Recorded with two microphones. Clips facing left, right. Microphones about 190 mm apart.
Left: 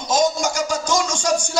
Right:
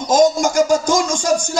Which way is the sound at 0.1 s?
55° right (ahead or behind).